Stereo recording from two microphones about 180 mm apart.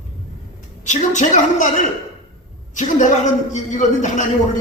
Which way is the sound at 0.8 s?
40° left (ahead or behind).